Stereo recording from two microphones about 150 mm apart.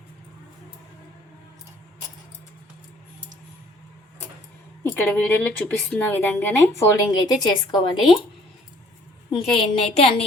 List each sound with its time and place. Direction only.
4.8 s a woman's voice: 10° left (ahead or behind); by 7.8 s 30° left (ahead or behind)
7.9 s a woman's voice: centre (ahead or behind)
9.5 s a woman's voice: 5° left (ahead or behind)
9.9 s a woman's voice: 40° left (ahead or behind)